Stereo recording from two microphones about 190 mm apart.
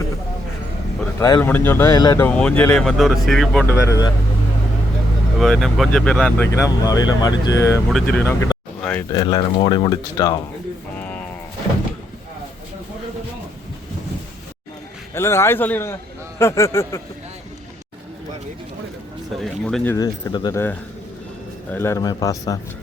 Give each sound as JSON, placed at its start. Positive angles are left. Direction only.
{"t": 1.2, "sound": "speech", "side_deg": 15}
{"t": 2.2, "sound": "speech", "side_deg": 5}
{"t": 3.8, "sound": "speech", "side_deg": 20}
{"t": 5.4, "sound": "speech", "side_deg": 0}
{"t": 8.8, "sound": "a sound", "side_deg": 5}
{"t": 9.1, "sound": "speech", "side_deg": 25}
{"t": 10.9, "sound": "a sound", "side_deg": 5}
{"t": 15.1, "sound": "speech", "side_deg": 15}
{"t": 19.4, "sound": "speech", "side_deg": 5}
{"t": 21.7, "sound": "speech", "side_deg": 10}